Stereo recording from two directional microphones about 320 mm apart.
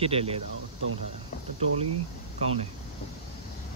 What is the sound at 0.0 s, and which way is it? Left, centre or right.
Speech, centre.